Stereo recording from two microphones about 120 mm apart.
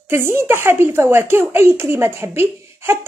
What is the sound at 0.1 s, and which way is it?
Speech, 20° right (ahead or behind).